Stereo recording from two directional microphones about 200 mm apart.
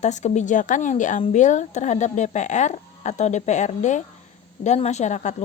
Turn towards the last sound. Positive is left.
turn(degrees=35)  # may be behind; listen again after turning